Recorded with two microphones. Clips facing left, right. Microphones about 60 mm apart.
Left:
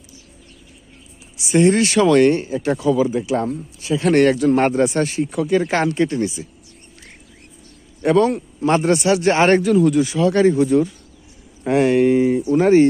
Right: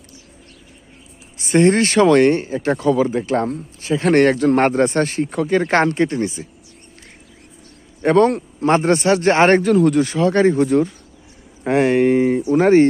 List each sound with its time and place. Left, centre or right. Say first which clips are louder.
1.4 s speech: right 1 dB; right
3.8 s speech: right 1 dB; right
8.0 s speech: right 2 dB; right
9.7 s speech: right 1 dB; right